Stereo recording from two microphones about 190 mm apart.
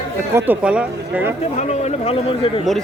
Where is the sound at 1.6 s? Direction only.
35° left (ahead or behind).